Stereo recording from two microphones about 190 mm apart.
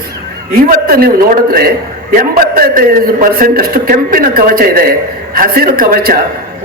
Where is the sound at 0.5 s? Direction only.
50° right (ahead or behind).